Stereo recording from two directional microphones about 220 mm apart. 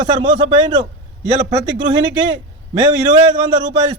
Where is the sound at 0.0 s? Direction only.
20° right (ahead or behind).